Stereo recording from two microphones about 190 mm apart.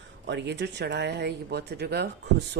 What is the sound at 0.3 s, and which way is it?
Speech, 65° right (ahead or behind).